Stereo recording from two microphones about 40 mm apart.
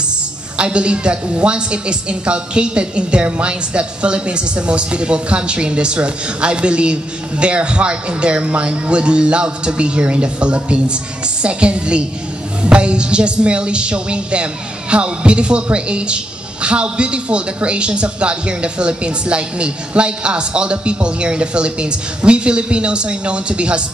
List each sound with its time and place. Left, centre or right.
0.6 s a woman's voice: right